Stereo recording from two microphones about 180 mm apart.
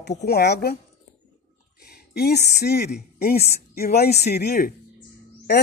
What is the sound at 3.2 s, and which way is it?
A woman's voice, 55° left (ahead or behind).